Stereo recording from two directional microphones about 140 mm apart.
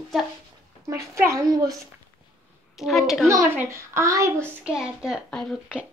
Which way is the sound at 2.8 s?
Centre (ahead or behind).